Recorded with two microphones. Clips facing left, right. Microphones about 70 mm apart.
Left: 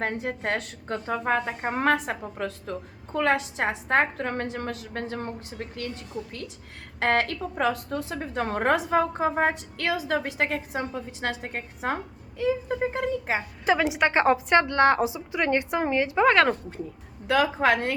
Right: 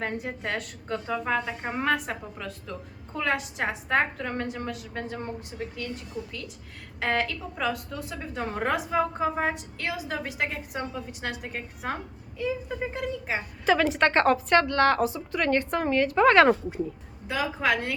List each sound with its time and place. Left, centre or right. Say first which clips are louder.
0.0 s a woman's voice: left 3 dB; left
7.0 s a woman's voice: left 3 dB; left
13.7 s a woman's voice: right 1 dB; centre
16.2 s speech: right 2 dB; centre
17.2 s a woman's voice: left 7 dB; left
17.6 s a woman's voice: left 3 dB; left